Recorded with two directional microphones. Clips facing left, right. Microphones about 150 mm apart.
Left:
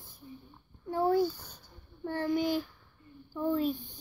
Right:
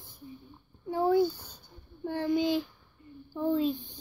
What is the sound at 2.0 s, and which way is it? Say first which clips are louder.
Child singing: right 2 dB; 15° right (ahead or behind).